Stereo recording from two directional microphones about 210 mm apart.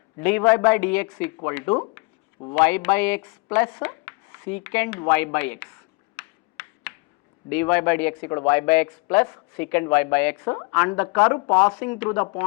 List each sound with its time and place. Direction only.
0.2 s speech: 10° left (ahead or behind)
6.1 s a sound: 10° left (ahead or behind)
7.5 s speech: 10° left (ahead or behind)